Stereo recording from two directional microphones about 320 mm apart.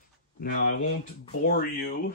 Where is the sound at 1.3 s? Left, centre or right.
Left.